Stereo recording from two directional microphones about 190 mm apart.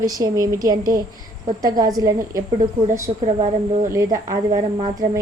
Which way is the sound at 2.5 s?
35° right (ahead or behind).